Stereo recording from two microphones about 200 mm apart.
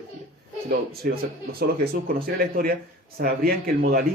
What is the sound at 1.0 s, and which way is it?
Speech, 50° right (ahead or behind).